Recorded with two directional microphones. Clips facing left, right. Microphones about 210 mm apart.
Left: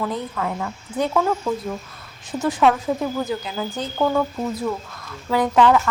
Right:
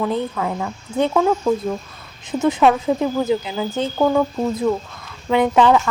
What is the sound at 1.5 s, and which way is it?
A woman's voice, 15° right (ahead or behind).